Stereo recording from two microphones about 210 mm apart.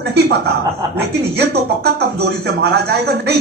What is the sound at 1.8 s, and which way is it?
A man's voice, 50° right (ahead or behind).